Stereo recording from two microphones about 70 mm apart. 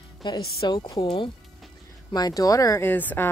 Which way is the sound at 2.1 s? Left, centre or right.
Left.